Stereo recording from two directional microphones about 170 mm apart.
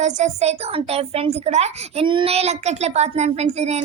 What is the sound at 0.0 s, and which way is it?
A child's voice, 40° right (ahead or behind).